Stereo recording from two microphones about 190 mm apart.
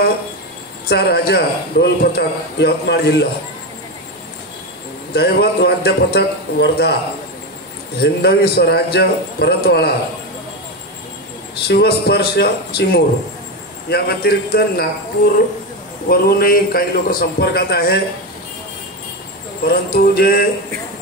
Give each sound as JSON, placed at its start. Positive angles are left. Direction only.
{"t": 0.8, "sound": "speech", "side_deg": 55}
{"t": 5.1, "sound": "speech", "side_deg": 60}
{"t": 8.0, "sound": "speech", "side_deg": 60}
{"t": 11.6, "sound": "speech", "side_deg": 60}
{"t": 16.1, "sound": "a man's voice", "side_deg": 50}
{"t": 19.7, "sound": "a man's voice", "side_deg": 55}